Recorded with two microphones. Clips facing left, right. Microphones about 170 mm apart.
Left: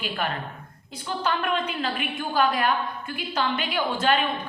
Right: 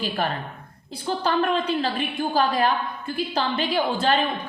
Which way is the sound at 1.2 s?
35° right (ahead or behind).